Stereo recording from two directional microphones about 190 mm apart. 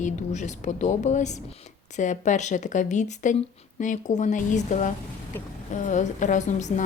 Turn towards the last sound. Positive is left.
turn(degrees=40)  # may be behind; listen again after turning